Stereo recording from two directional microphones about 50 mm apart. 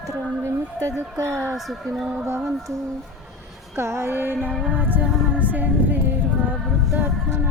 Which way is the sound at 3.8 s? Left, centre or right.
Right.